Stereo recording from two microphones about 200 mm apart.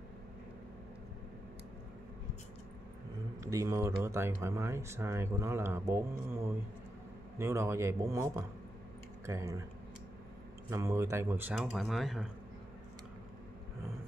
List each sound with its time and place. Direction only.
3.4 s speech: 15° right (ahead or behind)
10.7 s speech: 15° right (ahead or behind)